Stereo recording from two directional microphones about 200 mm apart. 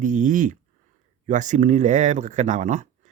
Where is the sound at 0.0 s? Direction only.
40° right (ahead or behind).